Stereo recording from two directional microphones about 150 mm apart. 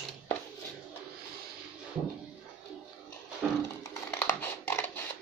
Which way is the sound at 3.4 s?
5° right (ahead or behind).